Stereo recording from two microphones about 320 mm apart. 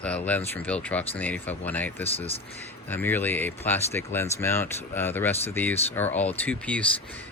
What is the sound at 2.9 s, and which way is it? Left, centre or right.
Speech, centre.